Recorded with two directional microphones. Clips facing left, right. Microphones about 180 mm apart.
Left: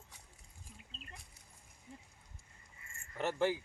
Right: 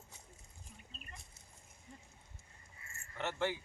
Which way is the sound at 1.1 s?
25° right (ahead or behind).